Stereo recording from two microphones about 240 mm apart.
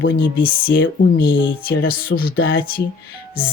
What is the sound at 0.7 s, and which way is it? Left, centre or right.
Speech, left.